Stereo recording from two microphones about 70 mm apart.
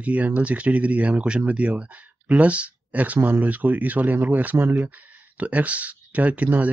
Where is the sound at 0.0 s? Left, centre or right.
Right.